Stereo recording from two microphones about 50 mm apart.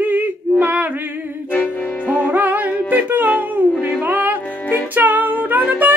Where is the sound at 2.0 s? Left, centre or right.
Right.